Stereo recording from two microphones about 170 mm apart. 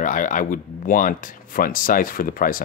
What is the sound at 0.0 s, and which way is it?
Speech, 50° left (ahead or behind).